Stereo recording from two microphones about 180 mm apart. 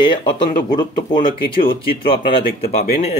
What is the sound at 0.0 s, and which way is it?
Speech, 25° left (ahead or behind).